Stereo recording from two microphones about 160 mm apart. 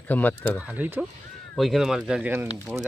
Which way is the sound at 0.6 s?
10° right (ahead or behind).